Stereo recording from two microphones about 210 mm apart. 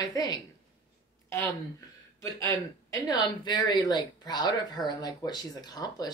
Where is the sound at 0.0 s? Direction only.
15° left (ahead or behind).